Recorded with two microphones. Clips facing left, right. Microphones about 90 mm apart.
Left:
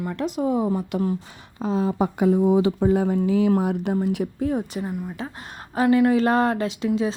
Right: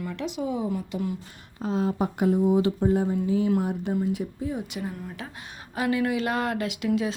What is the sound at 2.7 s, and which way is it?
Speech, 90° left.